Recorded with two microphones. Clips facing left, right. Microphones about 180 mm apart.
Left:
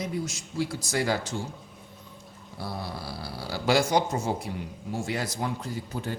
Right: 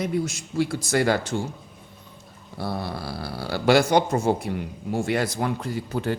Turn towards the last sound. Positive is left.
turn(degrees=-75)  # may be behind; listen again after turning